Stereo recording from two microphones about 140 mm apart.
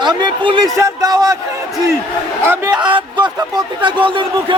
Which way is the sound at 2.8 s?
35° right (ahead or behind).